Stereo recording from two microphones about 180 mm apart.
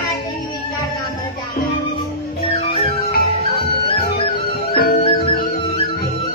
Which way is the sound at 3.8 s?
60° left (ahead or behind).